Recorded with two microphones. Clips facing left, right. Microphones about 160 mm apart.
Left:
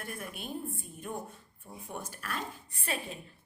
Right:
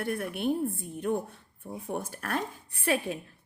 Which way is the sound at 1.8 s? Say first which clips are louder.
Right 6 dB; 55° right (ahead or behind).